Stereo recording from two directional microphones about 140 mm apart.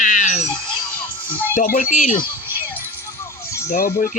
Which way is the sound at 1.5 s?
75° left (ahead or behind).